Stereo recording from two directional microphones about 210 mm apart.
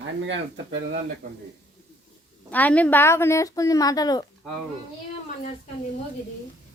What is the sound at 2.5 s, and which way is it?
A woman's voice, 5° left (ahead or behind).